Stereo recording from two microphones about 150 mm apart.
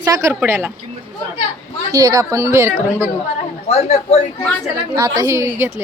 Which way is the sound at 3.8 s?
40° left (ahead or behind).